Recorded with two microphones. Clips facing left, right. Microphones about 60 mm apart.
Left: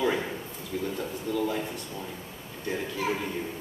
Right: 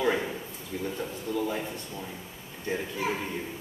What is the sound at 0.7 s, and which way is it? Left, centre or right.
Speech, centre.